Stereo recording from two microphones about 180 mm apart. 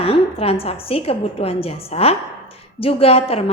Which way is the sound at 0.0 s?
30° left (ahead or behind).